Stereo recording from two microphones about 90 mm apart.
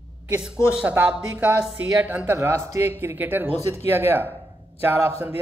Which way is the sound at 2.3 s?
30° right (ahead or behind).